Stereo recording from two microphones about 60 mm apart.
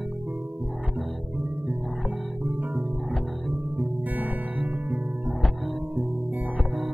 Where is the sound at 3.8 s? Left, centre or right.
Right.